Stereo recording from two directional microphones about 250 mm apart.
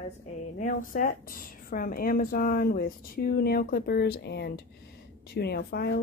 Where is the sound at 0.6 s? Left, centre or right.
Left.